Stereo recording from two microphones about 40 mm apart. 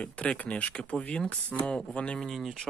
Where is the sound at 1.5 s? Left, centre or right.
Centre.